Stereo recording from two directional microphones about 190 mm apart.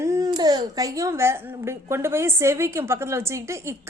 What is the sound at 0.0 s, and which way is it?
A woman's voice, 15° right (ahead or behind).